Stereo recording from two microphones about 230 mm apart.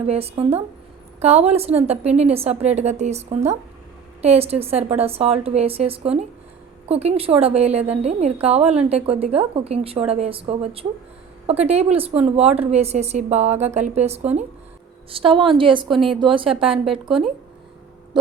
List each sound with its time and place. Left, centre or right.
0.0 s a woman's voice: right
16.6 s a woman's voice: centre